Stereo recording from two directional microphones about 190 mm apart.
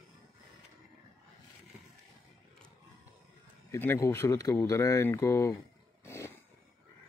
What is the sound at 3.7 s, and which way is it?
Speech, 15° left (ahead or behind).